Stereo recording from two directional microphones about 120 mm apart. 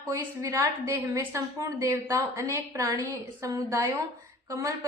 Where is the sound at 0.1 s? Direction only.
25° right (ahead or behind).